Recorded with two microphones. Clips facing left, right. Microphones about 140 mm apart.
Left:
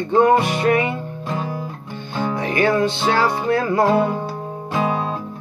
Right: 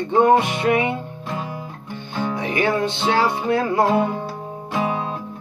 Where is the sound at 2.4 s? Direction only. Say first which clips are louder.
Left 3 dB; 20° right (ahead or behind).